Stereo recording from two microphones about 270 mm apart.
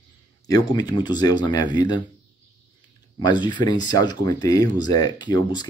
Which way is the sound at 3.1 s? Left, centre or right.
Centre.